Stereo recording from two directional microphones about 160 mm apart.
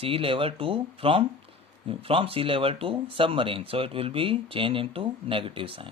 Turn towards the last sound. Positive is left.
turn(degrees=-35)  # may be behind; listen again after turning